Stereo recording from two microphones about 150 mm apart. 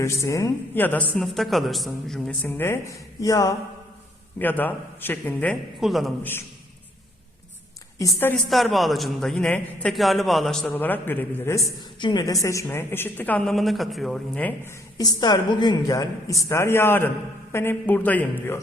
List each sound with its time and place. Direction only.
0.0 s a woman's voice: 20° left (ahead or behind)
4.4 s a woman's voice: 10° left (ahead or behind)
7.9 s a woman's voice: 20° left (ahead or behind)
8.4 s a man's voice: centre (ahead or behind)
11.9 s a woman's voice: 30° left (ahead or behind); by 18.6 s 15° left (ahead or behind)